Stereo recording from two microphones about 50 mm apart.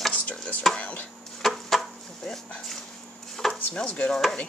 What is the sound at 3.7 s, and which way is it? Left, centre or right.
Stir, centre.